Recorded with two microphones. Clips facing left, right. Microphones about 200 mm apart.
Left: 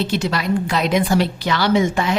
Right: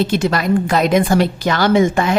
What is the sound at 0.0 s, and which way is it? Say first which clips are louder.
Speech: right 4 dB; 50° right (ahead or behind).